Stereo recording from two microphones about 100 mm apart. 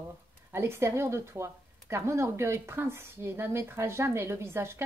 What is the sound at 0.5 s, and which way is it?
Speech, 25° right (ahead or behind).